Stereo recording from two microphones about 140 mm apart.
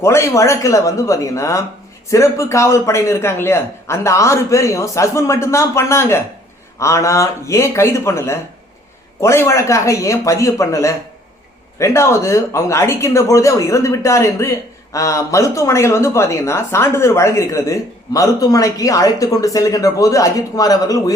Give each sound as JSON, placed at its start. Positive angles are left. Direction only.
{"t": 0.0, "sound": "speech", "side_deg": 20}